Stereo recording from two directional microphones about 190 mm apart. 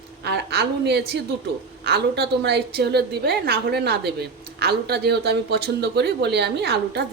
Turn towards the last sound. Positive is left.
turn(degrees=-60)  # may be behind; listen again after turning